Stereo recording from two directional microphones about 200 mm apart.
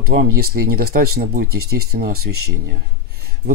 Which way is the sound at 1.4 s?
90° right.